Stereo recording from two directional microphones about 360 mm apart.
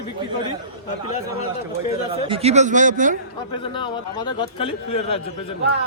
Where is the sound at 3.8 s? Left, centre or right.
Centre.